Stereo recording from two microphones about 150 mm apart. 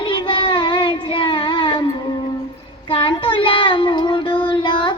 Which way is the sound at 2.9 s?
35° left (ahead or behind).